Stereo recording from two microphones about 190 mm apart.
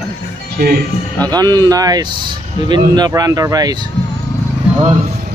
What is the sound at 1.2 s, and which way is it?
Speech, 20° right (ahead or behind).